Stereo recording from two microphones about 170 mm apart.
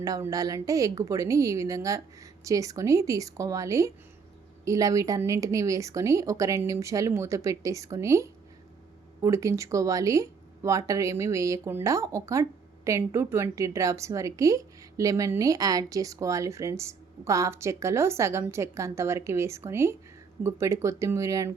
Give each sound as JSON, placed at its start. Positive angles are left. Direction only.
{"t": 0.0, "sound": "a woman's voice", "side_deg": -20}